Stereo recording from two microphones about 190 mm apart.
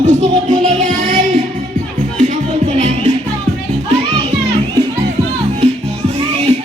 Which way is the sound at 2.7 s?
35° right (ahead or behind).